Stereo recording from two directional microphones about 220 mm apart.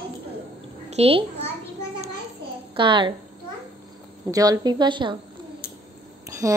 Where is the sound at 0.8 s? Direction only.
30° right (ahead or behind).